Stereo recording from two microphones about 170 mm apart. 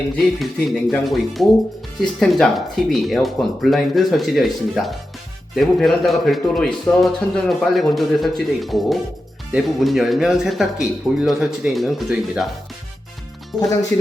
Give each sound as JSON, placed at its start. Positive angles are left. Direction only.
{"t": 0.2, "sound": "a man's voice", "side_deg": 0}
{"t": 13.9, "sound": "speech", "side_deg": 10}